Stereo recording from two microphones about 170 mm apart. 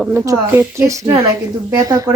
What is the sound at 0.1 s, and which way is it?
A woman's voice, 15° right (ahead or behind).